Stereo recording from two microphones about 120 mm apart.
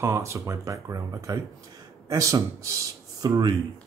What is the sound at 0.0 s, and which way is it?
Speech, 25° right (ahead or behind).